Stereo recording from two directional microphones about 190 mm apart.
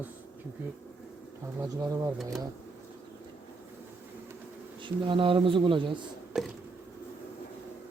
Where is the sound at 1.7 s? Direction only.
20° right (ahead or behind).